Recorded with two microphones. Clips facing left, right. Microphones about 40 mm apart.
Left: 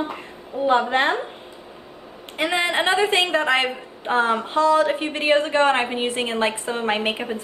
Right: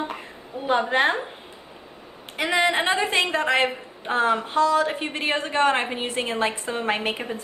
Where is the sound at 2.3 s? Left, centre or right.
Centre.